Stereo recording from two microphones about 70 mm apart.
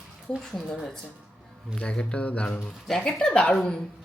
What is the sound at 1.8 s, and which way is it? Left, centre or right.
Speech, centre.